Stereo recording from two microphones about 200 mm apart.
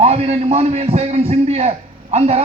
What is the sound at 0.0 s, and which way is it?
A man's voice, 30° right (ahead or behind).